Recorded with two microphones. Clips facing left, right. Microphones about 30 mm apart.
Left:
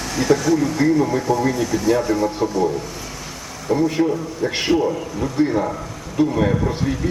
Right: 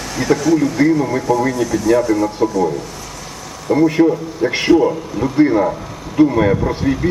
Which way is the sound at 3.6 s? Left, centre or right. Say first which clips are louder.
Right 5 dB; right.